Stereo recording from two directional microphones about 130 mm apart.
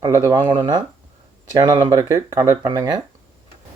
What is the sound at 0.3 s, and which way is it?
Speech, 35° right (ahead or behind).